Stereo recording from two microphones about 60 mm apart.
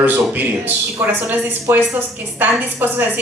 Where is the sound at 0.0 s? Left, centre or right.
Right.